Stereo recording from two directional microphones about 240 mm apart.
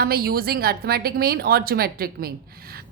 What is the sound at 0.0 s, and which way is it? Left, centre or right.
A woman's voice, right.